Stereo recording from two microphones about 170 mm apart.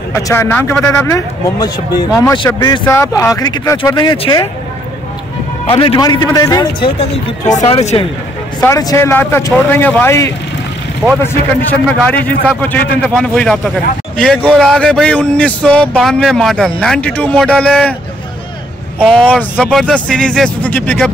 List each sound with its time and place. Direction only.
0.1 s a man's voice: 15° left (ahead or behind)
2.8 s a man's voice: 15° left (ahead or behind)
5.7 s speech: 30° left (ahead or behind)
7.0 s speech: 40° left (ahead or behind)
8.5 s a man's voice: 20° left (ahead or behind)
11.6 s a man's voice: 10° left (ahead or behind)
18.9 s a man's voice: 5° left (ahead or behind)